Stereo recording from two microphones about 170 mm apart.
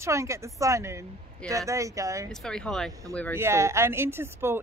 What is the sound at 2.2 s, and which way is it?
Speech, 5° left (ahead or behind).